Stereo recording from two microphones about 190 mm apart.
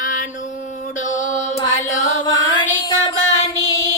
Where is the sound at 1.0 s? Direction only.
40° left (ahead or behind).